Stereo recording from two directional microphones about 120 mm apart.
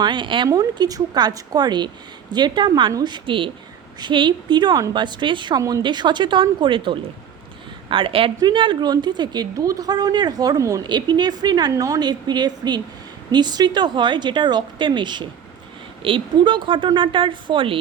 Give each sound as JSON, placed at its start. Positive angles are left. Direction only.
{"t": 0.0, "sound": "a woman's voice", "side_deg": -40}
{"t": 0.4, "sound": "a woman's voice", "side_deg": -30}